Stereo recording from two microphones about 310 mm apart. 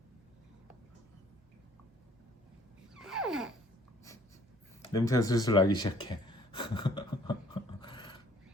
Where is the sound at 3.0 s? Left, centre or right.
Centre.